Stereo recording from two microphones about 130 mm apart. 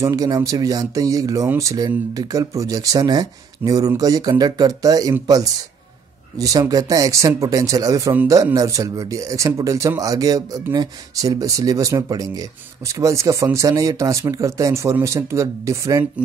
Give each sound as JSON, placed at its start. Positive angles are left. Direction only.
{"t": 0.0, "sound": "speech", "side_deg": -25}